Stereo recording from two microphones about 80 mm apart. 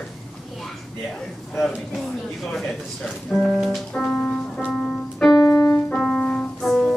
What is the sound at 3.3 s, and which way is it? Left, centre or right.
Speech, centre.